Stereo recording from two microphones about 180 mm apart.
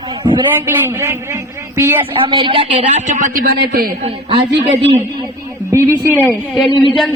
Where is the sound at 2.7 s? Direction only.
40° right (ahead or behind); by 3.9 s 55° right (ahead or behind).